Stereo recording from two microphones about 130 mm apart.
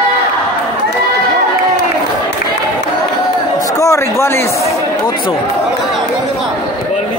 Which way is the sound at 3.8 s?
20° left (ahead or behind).